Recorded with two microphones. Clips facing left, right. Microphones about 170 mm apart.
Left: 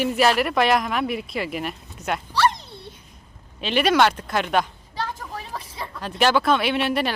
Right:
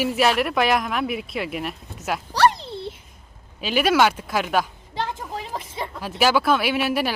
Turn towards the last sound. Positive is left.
turn(degrees=-5)  # may be behind; listen again after turning